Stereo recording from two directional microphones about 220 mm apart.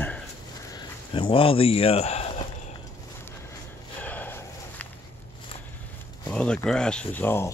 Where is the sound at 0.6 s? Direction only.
20° left (ahead or behind).